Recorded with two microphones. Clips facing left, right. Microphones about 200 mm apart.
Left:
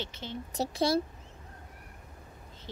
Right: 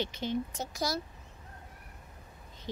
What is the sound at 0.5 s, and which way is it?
Speech, 30° left (ahead or behind).